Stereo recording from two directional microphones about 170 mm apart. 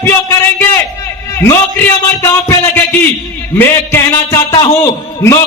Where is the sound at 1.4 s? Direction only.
15° left (ahead or behind).